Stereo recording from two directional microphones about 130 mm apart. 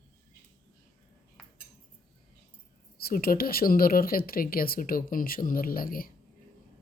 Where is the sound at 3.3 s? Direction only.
90° left.